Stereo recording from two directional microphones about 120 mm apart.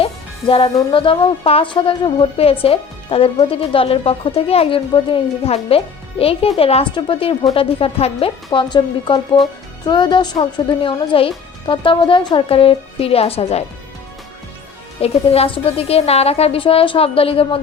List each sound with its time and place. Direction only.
0.0 s a woman's voice: 50° left (ahead or behind)
8.5 s a woman's voice: 40° left (ahead or behind); by 13.7 s 60° left (ahead or behind)
15.0 s speech: 55° left (ahead or behind)